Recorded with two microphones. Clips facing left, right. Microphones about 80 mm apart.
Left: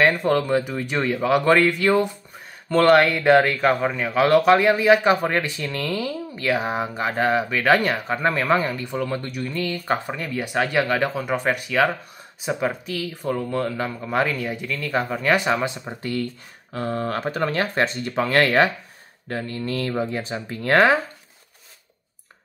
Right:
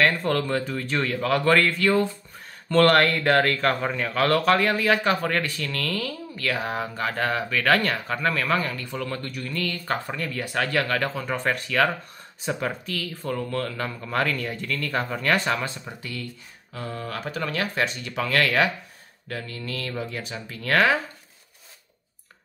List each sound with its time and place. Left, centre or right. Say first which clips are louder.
0.0 s speech: left 4 dB; centre
2.7 s speech: left 3 dB; centre
15.9 s speech: left 8 dB; left